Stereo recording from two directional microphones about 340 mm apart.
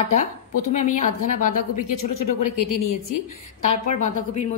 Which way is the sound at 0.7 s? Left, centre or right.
Left.